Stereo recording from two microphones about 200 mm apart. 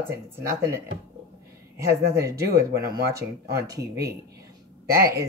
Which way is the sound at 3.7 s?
15° right (ahead or behind).